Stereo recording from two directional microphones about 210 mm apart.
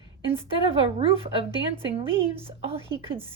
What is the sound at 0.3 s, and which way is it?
A woman's voice, 25° right (ahead or behind).